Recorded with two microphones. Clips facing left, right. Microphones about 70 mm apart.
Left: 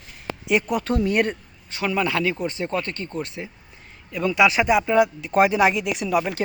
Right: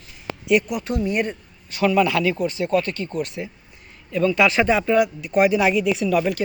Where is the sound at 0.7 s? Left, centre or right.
Left.